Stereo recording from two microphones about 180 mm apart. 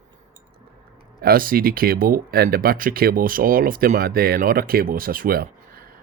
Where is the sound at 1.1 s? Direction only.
55° right (ahead or behind).